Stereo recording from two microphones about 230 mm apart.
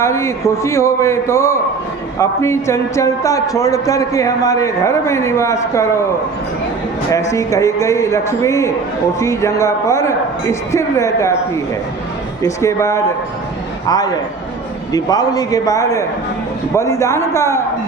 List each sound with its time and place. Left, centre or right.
0.0 s a man's voice: centre
7.1 s a man's voice: centre
12.4 s a man's voice: centre